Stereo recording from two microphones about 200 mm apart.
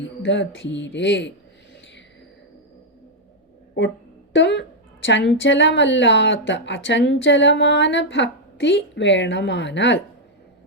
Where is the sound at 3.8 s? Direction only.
60° left (ahead or behind).